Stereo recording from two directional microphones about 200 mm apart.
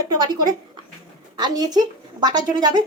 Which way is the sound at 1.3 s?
20° right (ahead or behind).